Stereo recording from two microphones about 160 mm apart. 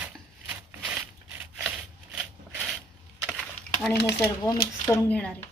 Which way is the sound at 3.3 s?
Centre (ahead or behind).